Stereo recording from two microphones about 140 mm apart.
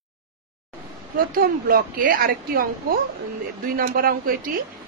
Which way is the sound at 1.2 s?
90° right.